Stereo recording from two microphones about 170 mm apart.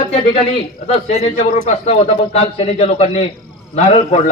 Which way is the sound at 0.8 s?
40° left (ahead or behind).